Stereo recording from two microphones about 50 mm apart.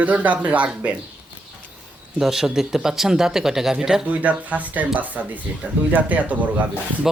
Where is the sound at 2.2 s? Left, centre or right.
Centre.